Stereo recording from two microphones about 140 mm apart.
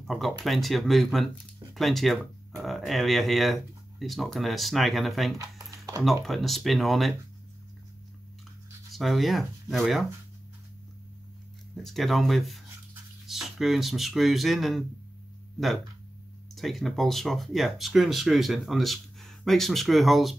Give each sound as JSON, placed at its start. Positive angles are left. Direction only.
{"t": 0.0, "sound": "speech", "side_deg": 0}
{"t": 5.4, "sound": "a sound", "side_deg": -20}
{"t": 6.0, "sound": "speech", "side_deg": 0}
{"t": 8.9, "sound": "speech", "side_deg": 0}
{"t": 11.7, "sound": "speech", "side_deg": 0}
{"t": 16.5, "sound": "speech", "side_deg": 0}